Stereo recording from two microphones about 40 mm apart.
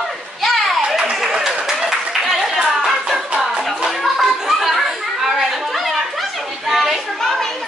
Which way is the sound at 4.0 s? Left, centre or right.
Centre.